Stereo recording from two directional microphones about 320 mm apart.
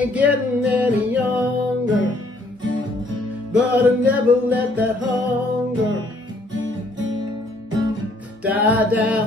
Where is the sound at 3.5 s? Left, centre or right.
Centre.